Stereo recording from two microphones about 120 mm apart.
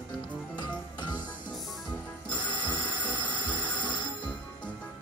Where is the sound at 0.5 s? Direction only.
35° left (ahead or behind).